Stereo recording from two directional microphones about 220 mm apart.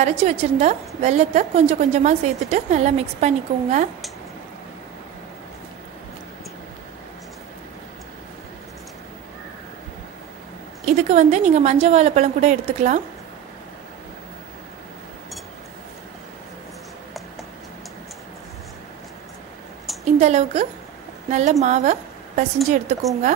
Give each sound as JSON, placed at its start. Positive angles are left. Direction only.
{"t": 0.0, "sound": "a woman's voice", "side_deg": -30}
{"t": 10.9, "sound": "a woman's voice", "side_deg": -30}
{"t": 20.1, "sound": "a woman's voice", "side_deg": -30}